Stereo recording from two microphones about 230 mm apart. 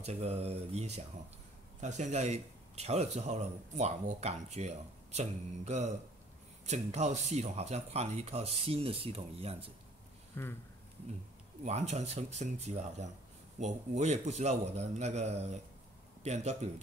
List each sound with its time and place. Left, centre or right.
0.0 s a man's voice: right
10.4 s speech: centre
11.6 s a man's voice: right